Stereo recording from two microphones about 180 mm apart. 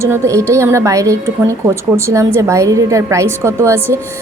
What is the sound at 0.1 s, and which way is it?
A woman's voice, 15° right (ahead or behind).